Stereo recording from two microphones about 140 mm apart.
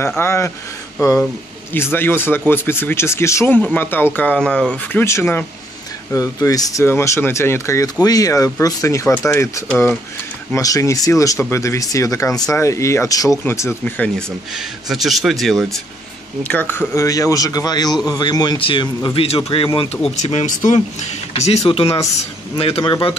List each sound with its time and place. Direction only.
0.2 s speech: 20° left (ahead or behind)
5.0 s speech: 15° left (ahead or behind); by 15.8 s centre (ahead or behind)
16.4 s speech: 15° left (ahead or behind); by 20.0 s 40° left (ahead or behind)
20.2 s a man's voice: 50° left (ahead or behind)